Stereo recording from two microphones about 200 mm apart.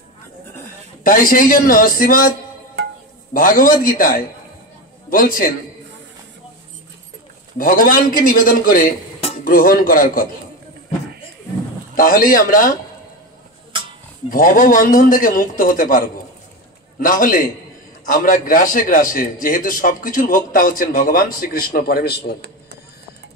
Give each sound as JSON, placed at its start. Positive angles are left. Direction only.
{"t": 1.0, "sound": "a man's voice", "side_deg": 45}
{"t": 3.3, "sound": "a man's voice", "side_deg": 45}
{"t": 7.5, "sound": "a man's voice", "side_deg": 45}
{"t": 11.9, "sound": "a man's voice", "side_deg": 45}
{"t": 14.3, "sound": "a man's voice", "side_deg": 45}
{"t": 17.0, "sound": "a man's voice", "side_deg": 45}